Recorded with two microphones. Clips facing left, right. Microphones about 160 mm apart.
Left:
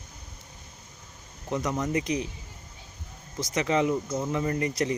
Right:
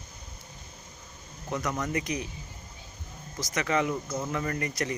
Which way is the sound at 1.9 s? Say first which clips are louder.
Left 4 dB; 25° left (ahead or behind).